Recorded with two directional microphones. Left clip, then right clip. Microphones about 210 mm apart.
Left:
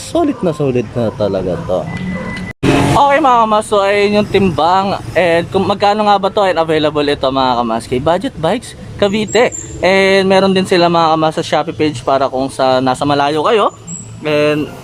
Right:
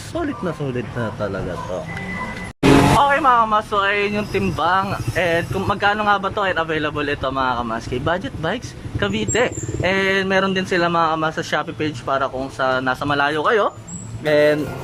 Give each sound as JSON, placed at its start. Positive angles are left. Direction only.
{"t": 0.1, "sound": "speech", "side_deg": 20}
{"t": 3.0, "sound": "speech", "side_deg": 20}